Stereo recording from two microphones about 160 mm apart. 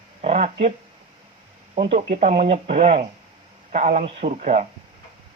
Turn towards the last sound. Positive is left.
turn(degrees=-50)  # may be behind; listen again after turning